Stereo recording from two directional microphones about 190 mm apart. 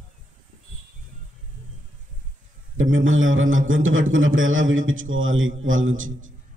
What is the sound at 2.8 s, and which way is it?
A man's voice, 90° right.